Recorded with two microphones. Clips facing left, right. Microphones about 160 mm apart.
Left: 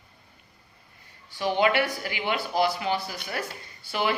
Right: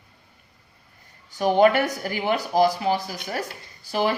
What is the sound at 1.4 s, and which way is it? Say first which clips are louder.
Speech: right 6 dB; 45° right (ahead or behind).